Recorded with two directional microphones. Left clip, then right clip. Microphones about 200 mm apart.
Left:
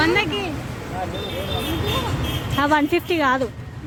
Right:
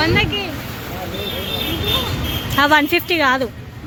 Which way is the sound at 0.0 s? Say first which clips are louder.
Right 2 dB; 50° left (ahead or behind).